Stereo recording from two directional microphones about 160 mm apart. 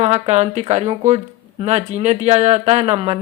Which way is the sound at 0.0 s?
45° right (ahead or behind).